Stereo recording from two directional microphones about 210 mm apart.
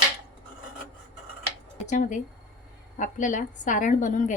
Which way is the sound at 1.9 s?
35° left (ahead or behind).